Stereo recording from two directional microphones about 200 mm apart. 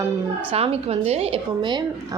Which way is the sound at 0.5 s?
30° right (ahead or behind).